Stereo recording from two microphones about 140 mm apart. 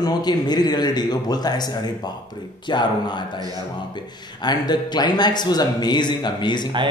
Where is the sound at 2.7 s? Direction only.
35° left (ahead or behind).